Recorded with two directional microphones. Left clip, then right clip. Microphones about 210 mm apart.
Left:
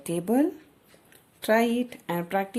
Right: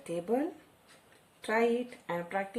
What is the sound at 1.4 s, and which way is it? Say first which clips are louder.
A woman's voice: left 6 dB; 50° left (ahead or behind).